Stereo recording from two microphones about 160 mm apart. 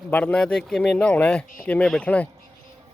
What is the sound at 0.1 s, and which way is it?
A man's voice, 10° left (ahead or behind).